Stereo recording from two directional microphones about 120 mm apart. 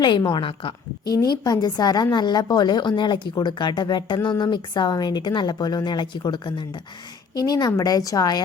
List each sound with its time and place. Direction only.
0.0 s a woman's voice: 35° left (ahead or behind)
1.1 s a woman's voice: 30° left (ahead or behind)